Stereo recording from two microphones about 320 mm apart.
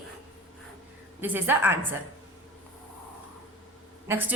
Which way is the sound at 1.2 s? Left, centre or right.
Centre.